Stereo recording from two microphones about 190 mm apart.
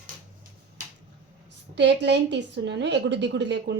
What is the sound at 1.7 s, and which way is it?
A woman's voice, 65° right (ahead or behind).